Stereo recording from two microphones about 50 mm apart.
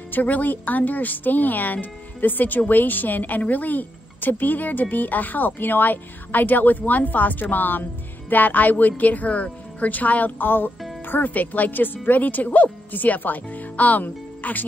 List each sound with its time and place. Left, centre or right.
0.1 s a woman's voice: left